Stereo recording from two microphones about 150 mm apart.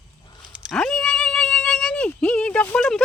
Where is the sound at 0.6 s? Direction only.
Centre (ahead or behind).